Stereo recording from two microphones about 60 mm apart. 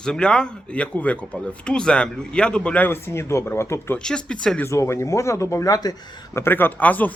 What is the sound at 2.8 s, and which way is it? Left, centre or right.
Speech, left.